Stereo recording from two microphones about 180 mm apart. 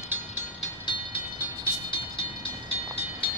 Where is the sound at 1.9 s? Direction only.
25° left (ahead or behind).